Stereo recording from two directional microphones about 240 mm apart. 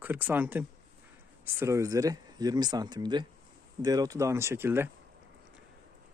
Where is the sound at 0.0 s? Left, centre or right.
Centre.